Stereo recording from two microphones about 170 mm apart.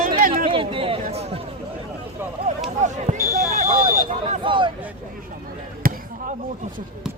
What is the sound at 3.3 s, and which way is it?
Basketball bounce, 55° right (ahead or behind).